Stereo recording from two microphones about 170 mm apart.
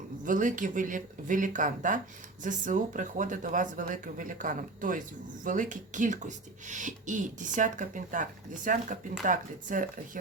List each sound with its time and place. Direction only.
0.3 s speech: 50° right (ahead or behind)